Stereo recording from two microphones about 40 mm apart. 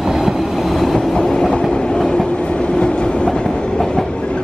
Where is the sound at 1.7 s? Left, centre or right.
Centre.